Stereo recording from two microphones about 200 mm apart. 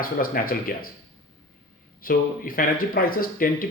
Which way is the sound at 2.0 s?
45° left (ahead or behind).